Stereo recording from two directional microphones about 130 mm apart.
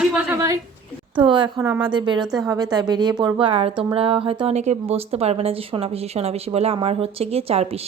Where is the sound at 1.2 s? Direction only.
40° right (ahead or behind).